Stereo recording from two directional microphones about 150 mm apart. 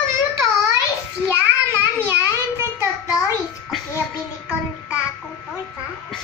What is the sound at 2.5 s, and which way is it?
Child singing, 15° right (ahead or behind).